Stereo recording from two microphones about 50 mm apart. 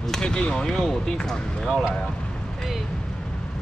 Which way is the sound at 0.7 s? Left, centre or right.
Centre.